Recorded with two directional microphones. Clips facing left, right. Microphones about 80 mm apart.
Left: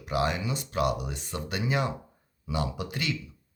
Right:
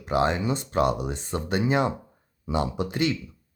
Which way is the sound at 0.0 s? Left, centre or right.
Right.